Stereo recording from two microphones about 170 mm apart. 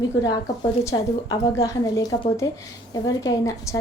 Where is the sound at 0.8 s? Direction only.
20° left (ahead or behind).